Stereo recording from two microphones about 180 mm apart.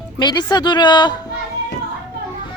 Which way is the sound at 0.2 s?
20° left (ahead or behind).